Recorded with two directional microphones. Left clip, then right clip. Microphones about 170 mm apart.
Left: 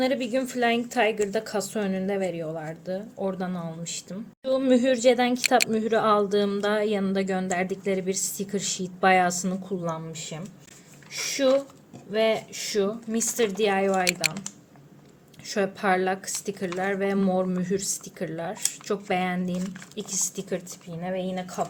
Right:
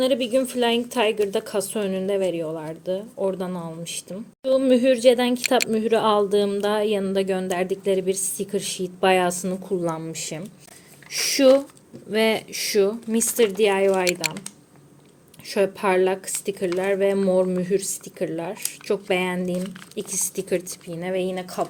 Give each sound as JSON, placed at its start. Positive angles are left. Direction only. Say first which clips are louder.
{"t": 0.0, "sound": "a woman's voice", "louder": "right 5 dB", "side_deg": -20}
{"t": 9.8, "sound": "speech", "louder": "right 5 dB", "side_deg": -35}
{"t": 14.0, "sound": "speech", "louder": "right 2 dB", "side_deg": 0}
{"t": 15.4, "sound": "speech", "louder": "right 3 dB", "side_deg": -20}